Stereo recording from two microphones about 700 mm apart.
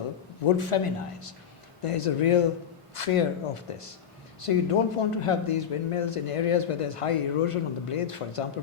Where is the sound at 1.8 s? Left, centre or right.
Left.